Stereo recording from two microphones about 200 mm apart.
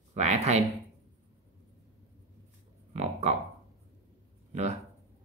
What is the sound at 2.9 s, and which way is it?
Speech, 35° right (ahead or behind).